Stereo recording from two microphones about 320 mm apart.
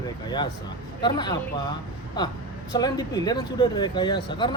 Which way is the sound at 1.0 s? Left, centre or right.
Centre.